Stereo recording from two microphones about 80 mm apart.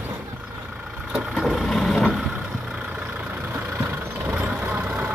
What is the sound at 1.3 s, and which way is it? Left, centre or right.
Vehicle, centre.